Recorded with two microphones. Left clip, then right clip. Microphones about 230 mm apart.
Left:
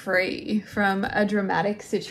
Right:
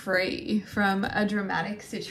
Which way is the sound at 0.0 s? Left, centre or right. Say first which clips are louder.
Left 3 dB; centre.